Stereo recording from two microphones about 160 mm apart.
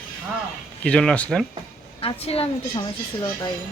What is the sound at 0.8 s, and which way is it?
Speech, 5° left (ahead or behind).